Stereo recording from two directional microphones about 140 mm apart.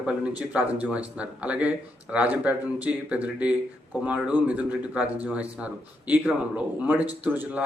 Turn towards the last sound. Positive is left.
turn(degrees=-10)  # may be behind; listen again after turning